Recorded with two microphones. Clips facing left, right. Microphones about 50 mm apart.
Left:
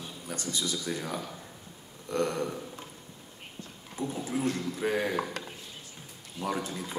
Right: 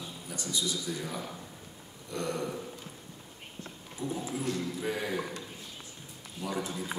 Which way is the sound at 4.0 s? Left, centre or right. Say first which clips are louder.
Left 3 dB; left.